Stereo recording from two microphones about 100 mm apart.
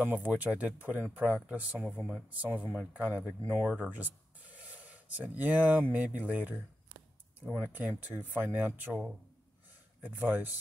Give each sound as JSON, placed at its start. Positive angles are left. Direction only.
{"t": 0.0, "sound": "speech", "side_deg": -15}
{"t": 1.8, "sound": "speech", "side_deg": 0}
{"t": 10.0, "sound": "speech", "side_deg": -15}